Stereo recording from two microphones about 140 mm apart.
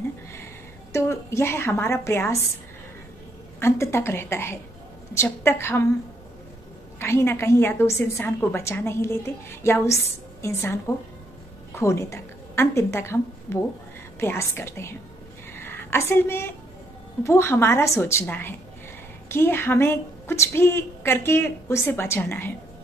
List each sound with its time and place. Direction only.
0.9 s a woman's voice: 20° left (ahead or behind)
3.5 s a woman's voice: 20° left (ahead or behind)
7.0 s a woman's voice: 20° left (ahead or behind)
15.5 s a sound: 15° left (ahead or behind)
17.2 s a woman's voice: 20° left (ahead or behind)